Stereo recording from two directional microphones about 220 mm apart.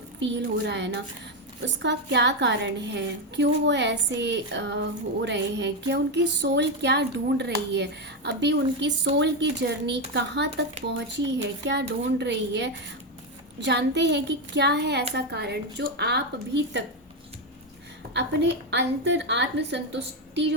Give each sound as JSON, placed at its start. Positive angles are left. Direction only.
{"t": 0.2, "sound": "a woman's voice", "side_deg": -55}
{"t": 18.1, "sound": "a woman's voice", "side_deg": -50}